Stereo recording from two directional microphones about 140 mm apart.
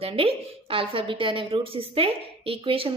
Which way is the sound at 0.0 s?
40° right (ahead or behind).